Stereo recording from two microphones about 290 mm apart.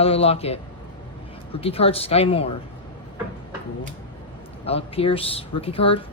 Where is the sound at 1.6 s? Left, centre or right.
Centre.